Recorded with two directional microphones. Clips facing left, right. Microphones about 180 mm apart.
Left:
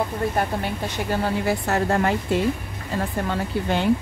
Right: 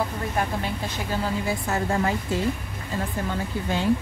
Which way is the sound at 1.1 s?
65° left (ahead or behind).